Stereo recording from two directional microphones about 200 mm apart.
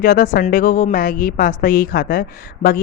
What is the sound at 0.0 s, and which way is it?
A woman's voice, 45° left (ahead or behind).